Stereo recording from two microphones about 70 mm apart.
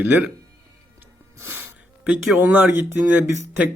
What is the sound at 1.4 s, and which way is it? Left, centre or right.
Music, right.